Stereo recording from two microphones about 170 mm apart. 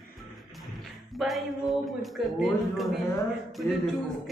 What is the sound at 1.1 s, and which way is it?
Speech, centre (ahead or behind).